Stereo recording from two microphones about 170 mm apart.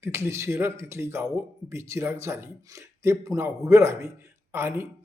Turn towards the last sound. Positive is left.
turn(degrees=-15)  # may be behind; listen again after turning